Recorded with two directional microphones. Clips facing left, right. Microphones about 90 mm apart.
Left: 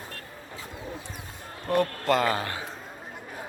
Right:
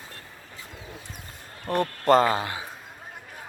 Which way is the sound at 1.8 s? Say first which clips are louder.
Right 4 dB; 30° right (ahead or behind).